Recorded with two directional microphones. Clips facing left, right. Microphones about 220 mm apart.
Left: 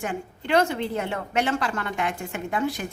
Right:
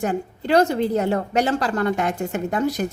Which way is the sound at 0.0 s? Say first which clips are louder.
Right 7 dB; 40° right (ahead or behind).